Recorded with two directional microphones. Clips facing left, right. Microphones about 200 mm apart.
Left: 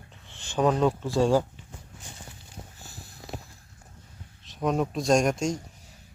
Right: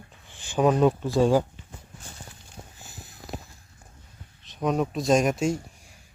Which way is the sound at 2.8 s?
20° right (ahead or behind).